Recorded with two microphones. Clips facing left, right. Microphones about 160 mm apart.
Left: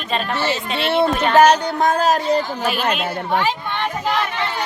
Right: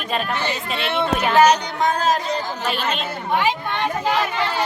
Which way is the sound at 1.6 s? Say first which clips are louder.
Left 3 dB; 50° left (ahead or behind).